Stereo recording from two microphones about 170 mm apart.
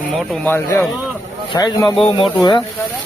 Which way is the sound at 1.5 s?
25° left (ahead or behind).